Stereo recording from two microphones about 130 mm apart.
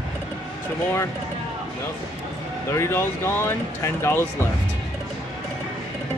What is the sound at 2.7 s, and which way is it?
Speech, 20° left (ahead or behind).